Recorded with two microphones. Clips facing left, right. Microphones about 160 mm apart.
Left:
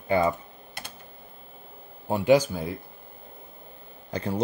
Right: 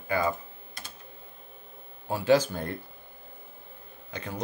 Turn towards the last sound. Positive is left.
turn(degrees=35)  # may be behind; listen again after turning